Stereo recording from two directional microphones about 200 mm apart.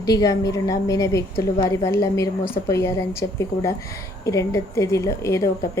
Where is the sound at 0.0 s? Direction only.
15° left (ahead or behind).